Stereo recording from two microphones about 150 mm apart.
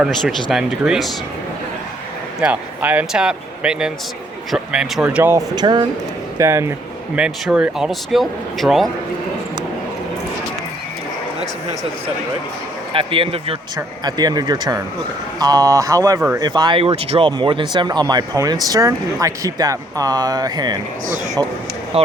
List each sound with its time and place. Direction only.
0.0 s speech: centre (ahead or behind)
2.4 s speech: 10° right (ahead or behind)
5.5 s speech: 30° right (ahead or behind)
6.4 s speech: 20° right (ahead or behind)
7.2 s speech: 5° right (ahead or behind)
12.9 s speech: 35° right (ahead or behind)
13.7 s speech: 25° right (ahead or behind)
21.9 s speech: 40° right (ahead or behind)